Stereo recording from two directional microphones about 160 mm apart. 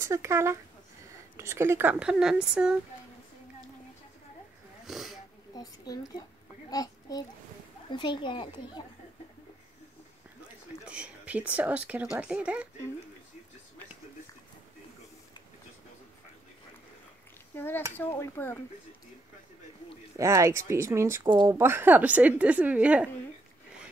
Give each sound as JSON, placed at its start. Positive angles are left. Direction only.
{"t": 0.0, "sound": "speech", "side_deg": -15}
{"t": 4.8, "sound": "a sound", "side_deg": 0}
{"t": 5.5, "sound": "a child's voice", "side_deg": 25}
{"t": 10.9, "sound": "speech", "side_deg": -10}
{"t": 17.6, "sound": "speech", "side_deg": 15}
{"t": 20.2, "sound": "speech", "side_deg": -20}